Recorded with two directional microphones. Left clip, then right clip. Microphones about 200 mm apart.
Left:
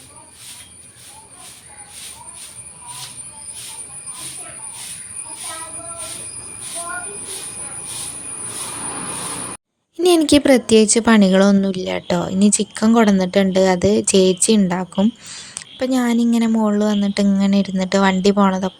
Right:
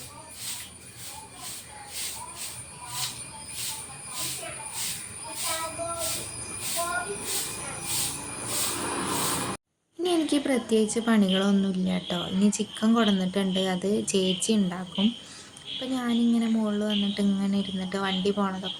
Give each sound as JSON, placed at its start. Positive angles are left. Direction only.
{"t": 10.0, "sound": "a woman's voice", "side_deg": 50}